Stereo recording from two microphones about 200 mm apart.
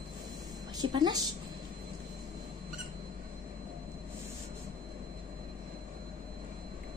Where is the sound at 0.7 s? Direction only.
20° right (ahead or behind).